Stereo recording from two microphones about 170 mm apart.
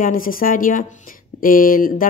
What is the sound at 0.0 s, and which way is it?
Speech, 55° left (ahead or behind).